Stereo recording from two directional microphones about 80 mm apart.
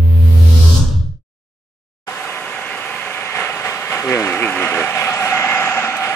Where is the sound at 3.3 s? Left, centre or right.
Left.